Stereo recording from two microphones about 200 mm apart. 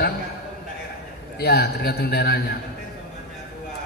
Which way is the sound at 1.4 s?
50° left (ahead or behind).